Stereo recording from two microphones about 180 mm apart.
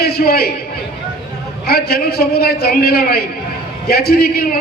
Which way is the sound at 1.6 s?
60° left (ahead or behind).